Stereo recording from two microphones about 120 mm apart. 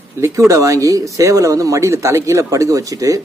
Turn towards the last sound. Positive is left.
turn(degrees=-30)  # may be behind; listen again after turning